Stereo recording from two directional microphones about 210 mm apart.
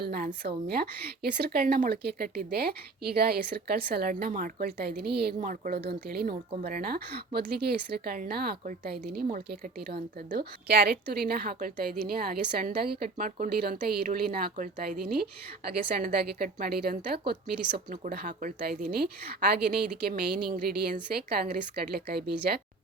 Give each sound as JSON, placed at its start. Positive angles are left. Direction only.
{"t": 0.0, "sound": "a woman's voice", "side_deg": -45}